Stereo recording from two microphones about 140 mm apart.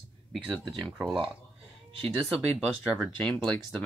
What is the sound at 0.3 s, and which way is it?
Speech, centre (ahead or behind).